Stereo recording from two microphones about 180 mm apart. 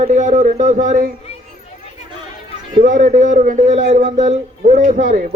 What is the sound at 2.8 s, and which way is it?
Speech, 45° right (ahead or behind).